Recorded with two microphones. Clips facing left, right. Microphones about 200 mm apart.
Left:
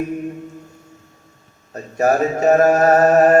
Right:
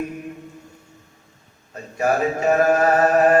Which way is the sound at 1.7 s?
40° left (ahead or behind).